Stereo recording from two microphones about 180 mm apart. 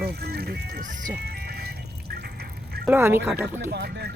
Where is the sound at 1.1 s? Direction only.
65° right (ahead or behind).